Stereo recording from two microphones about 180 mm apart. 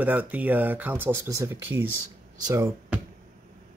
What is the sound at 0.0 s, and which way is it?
Speech, 10° right (ahead or behind).